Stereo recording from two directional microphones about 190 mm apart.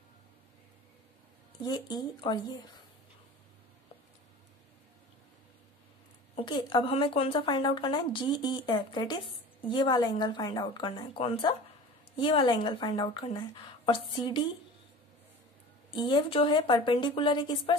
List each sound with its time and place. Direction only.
1.6 s speech: 20° left (ahead or behind)
6.3 s speech: 25° left (ahead or behind)
15.9 s speech: 25° left (ahead or behind)